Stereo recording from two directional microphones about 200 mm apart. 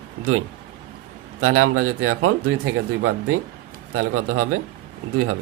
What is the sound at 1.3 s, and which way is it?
Speech, 90° right.